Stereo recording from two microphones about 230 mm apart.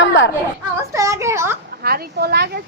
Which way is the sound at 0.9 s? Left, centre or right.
Centre.